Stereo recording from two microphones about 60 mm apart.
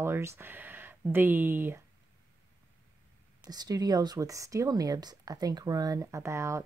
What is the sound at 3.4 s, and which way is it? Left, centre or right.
Speech, right.